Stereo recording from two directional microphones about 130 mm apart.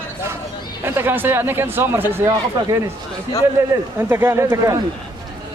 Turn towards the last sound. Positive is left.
turn(degrees=-25)  # may be behind; listen again after turning